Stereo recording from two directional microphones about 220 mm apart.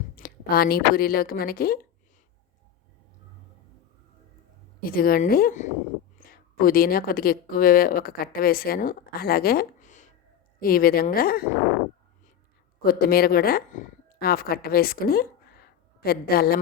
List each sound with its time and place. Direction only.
0.2 s speech: 45° left (ahead or behind)
4.9 s speech: 40° left (ahead or behind)
12.8 s speech: 45° left (ahead or behind)